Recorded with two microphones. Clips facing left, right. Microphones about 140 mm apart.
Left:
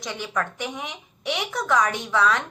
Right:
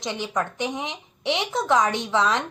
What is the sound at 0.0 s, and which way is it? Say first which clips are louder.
A woman's voice: right 2 dB; 20° right (ahead or behind).